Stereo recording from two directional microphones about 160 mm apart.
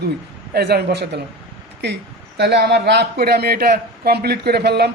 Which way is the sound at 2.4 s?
90° right.